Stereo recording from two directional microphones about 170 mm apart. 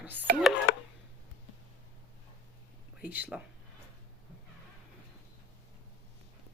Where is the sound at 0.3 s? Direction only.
65° right (ahead or behind).